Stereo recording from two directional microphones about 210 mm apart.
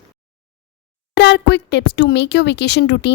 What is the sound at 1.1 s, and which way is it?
Speech, 55° left (ahead or behind).